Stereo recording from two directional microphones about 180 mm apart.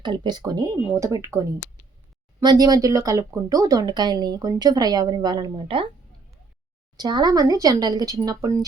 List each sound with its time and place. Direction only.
0.0 s speech: 25° right (ahead or behind)
6.9 s speech: 25° right (ahead or behind)